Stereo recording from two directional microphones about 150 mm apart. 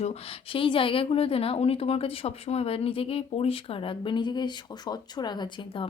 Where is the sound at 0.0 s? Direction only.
40° left (ahead or behind).